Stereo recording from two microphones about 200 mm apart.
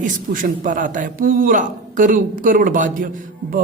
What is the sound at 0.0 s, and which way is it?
A man's voice, 40° right (ahead or behind).